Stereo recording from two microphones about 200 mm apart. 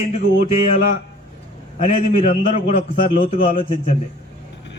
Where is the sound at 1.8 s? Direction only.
40° left (ahead or behind).